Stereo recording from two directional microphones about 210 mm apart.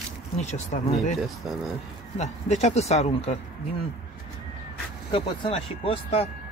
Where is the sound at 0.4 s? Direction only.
35° left (ahead or behind).